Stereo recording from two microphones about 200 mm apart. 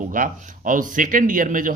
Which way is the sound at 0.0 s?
40° right (ahead or behind).